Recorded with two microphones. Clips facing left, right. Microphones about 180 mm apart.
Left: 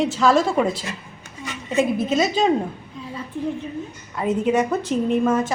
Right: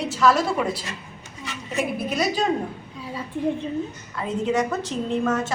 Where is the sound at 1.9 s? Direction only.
25° left (ahead or behind).